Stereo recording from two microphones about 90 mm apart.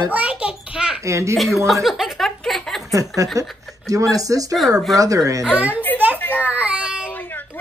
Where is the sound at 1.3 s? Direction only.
Centre (ahead or behind).